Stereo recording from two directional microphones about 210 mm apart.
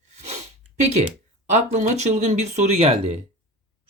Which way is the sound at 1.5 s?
35° right (ahead or behind).